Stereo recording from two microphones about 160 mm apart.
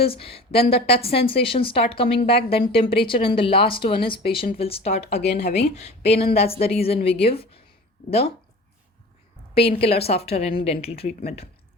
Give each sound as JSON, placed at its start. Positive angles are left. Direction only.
{"t": 0.0, "sound": "a woman's voice", "side_deg": 35}
{"t": 5.1, "sound": "speech", "side_deg": 90}
{"t": 5.5, "sound": "a woman's voice", "side_deg": 40}
{"t": 9.6, "sound": "a woman's voice", "side_deg": 35}